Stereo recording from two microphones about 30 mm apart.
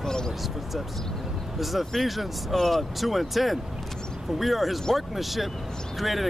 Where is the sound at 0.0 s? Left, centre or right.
Left.